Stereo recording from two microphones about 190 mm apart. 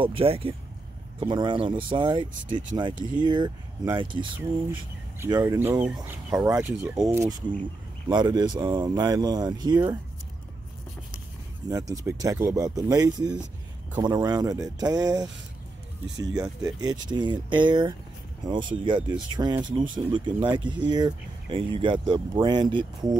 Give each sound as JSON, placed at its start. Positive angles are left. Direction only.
{"t": 0.0, "sound": "speech", "side_deg": -30}
{"t": 11.7, "sound": "speech", "side_deg": -15}
{"t": 16.6, "sound": "speech", "side_deg": -20}